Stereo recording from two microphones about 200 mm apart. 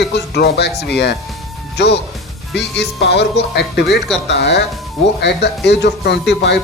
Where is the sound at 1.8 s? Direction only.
60° left (ahead or behind).